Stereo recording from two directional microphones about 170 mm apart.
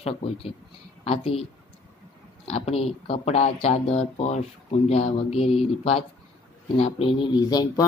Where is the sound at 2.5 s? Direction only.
40° left (ahead or behind).